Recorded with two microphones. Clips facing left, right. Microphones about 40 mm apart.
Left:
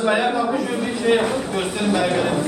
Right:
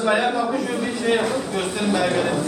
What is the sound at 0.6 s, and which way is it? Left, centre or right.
A man's voice, left.